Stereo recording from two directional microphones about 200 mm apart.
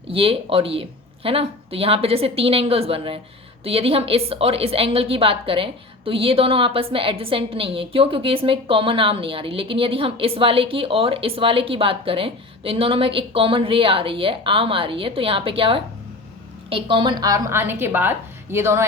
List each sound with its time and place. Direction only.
0.1 s a woman's voice: 25° right (ahead or behind)